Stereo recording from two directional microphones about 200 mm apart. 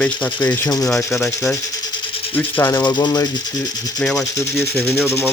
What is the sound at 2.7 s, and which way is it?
Speech, 20° left (ahead or behind).